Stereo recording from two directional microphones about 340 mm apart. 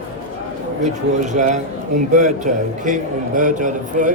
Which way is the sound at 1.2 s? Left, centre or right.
Right.